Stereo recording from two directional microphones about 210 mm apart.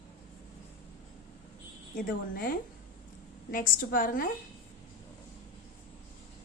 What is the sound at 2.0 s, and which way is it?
A woman's voice, 40° left (ahead or behind).